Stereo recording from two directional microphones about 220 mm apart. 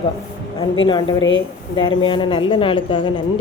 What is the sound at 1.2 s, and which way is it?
Speech, 60° left (ahead or behind).